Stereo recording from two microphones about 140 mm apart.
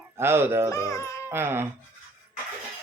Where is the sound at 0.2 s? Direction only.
15° right (ahead or behind).